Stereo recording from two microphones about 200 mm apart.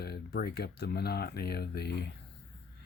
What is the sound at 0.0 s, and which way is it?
Speech, 55° left (ahead or behind).